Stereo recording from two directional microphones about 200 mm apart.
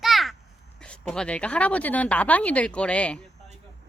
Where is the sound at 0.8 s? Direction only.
5° left (ahead or behind).